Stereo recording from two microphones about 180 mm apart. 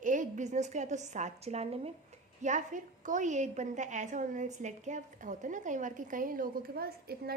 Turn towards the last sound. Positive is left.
turn(degrees=-60)  # may be behind; listen again after turning